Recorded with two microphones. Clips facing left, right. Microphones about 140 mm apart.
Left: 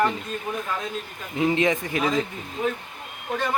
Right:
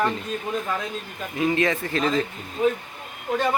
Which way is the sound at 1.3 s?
20° left (ahead or behind).